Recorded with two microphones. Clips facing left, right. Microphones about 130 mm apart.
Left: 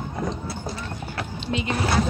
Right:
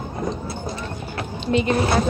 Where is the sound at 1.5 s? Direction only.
50° right (ahead or behind).